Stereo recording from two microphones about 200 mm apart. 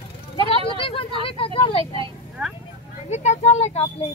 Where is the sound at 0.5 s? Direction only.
25° left (ahead or behind).